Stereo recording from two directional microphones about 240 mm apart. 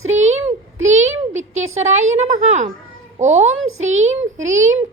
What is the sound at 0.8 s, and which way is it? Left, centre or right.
A child's voice, right.